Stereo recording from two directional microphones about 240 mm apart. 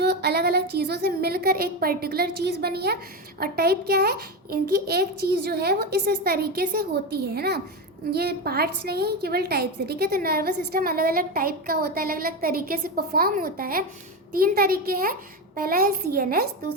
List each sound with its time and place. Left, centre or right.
0.0 s a woman's voice: right